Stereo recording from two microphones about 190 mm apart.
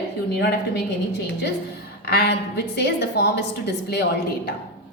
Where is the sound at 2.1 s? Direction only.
60° left (ahead or behind).